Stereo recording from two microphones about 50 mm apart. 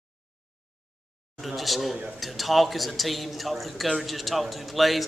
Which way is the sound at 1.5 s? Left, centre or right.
Centre.